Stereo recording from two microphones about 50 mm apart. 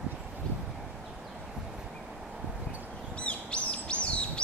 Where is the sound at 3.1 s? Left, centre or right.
Left.